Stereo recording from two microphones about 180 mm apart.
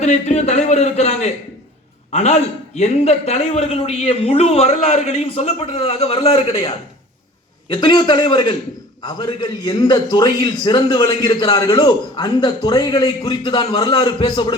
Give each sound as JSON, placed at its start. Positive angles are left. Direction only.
{"t": 0.0, "sound": "a man's voice", "side_deg": 40}